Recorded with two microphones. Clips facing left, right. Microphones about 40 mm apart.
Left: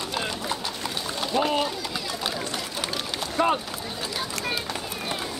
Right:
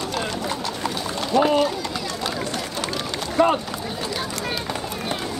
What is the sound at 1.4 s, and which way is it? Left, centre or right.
Speech, centre.